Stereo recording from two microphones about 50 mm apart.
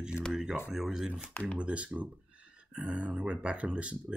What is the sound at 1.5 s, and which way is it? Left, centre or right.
Speech, right.